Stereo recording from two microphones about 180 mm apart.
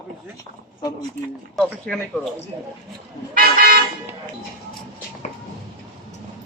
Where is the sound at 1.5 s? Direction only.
5° left (ahead or behind).